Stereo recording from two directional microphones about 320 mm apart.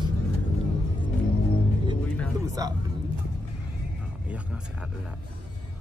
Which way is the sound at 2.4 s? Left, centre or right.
Centre.